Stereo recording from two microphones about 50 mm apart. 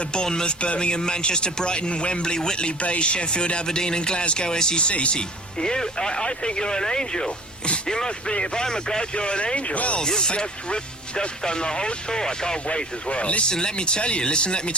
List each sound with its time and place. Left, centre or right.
0.0 s speech: centre
10.0 s speech: centre